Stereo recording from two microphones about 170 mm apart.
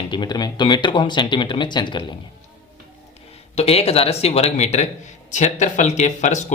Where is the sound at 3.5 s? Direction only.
35° left (ahead or behind).